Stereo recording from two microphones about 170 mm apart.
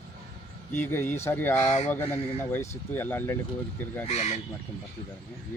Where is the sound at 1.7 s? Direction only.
45° left (ahead or behind).